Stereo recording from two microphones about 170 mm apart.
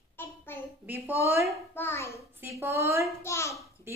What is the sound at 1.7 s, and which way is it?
Speech, 15° left (ahead or behind).